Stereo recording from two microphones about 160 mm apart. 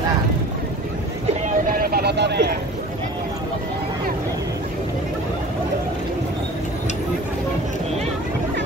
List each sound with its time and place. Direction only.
1.4 s vehicle: 65° right (ahead or behind); by 2.5 s 90° right